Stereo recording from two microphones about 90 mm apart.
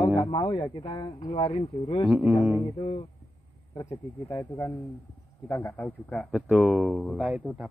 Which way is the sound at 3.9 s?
30° left (ahead or behind).